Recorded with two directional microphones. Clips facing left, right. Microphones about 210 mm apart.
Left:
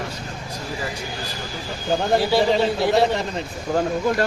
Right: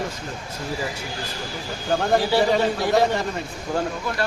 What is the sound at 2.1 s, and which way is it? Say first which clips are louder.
Speech: left 1 dB; 10° left (ahead or behind).